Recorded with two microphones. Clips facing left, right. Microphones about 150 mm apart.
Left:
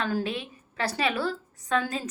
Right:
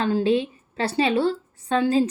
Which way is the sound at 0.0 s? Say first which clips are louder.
Right 8 dB; 25° right (ahead or behind).